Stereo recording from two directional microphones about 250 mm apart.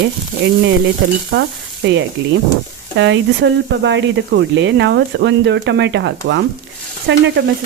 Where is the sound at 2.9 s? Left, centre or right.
Right.